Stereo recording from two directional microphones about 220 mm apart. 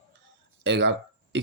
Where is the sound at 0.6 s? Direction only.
55° right (ahead or behind).